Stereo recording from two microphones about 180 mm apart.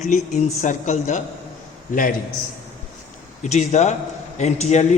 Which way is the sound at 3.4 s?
40° left (ahead or behind).